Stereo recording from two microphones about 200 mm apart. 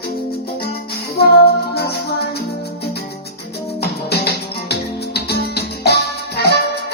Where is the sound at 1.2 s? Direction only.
50° left (ahead or behind).